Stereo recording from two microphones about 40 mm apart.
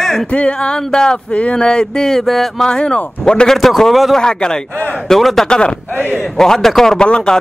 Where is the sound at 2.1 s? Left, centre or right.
Centre.